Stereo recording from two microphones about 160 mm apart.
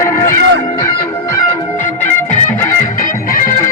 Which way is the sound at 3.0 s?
55° left (ahead or behind).